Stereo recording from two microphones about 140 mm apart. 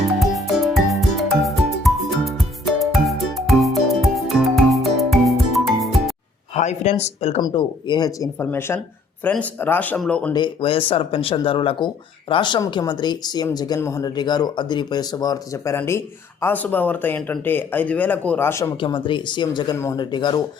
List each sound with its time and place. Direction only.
0.2 s music: centre (ahead or behind)
6.5 s speech: 55° left (ahead or behind)
7.4 s speech: 35° left (ahead or behind)
8.4 s speech: 15° left (ahead or behind)
10.3 s speech: 35° left (ahead or behind); by 18.7 s 20° left (ahead or behind)
18.8 s speech: 35° left (ahead or behind)
19.7 s speech: 20° left (ahead or behind)
20.0 s speech: 35° left (ahead or behind)